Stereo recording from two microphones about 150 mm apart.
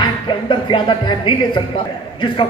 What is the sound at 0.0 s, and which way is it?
A man's voice, 30° left (ahead or behind).